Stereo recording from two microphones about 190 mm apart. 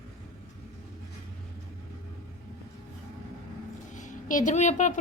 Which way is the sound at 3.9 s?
40° left (ahead or behind).